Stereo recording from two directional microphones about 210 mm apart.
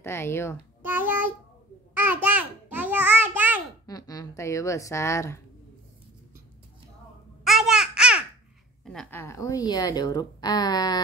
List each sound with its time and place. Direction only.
0.0 s speech: 10° left (ahead or behind)
0.8 s child singing: 10° right (ahead or behind)
2.2 s a sound: 5° right (ahead or behind)
3.8 s speech: 15° left (ahead or behind)
7.4 s babbling: centre (ahead or behind)
8.8 s a woman's voice: centre (ahead or behind)
9.2 s speech: 15° left (ahead or behind)